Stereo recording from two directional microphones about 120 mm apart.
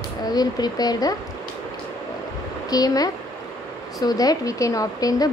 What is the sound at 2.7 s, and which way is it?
Speech, 30° left (ahead or behind).